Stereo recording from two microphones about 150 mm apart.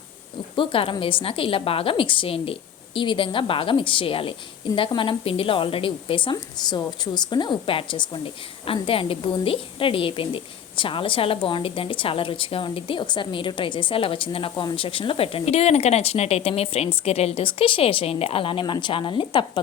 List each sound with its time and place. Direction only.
0.5 s a woman's voice: 35° left (ahead or behind)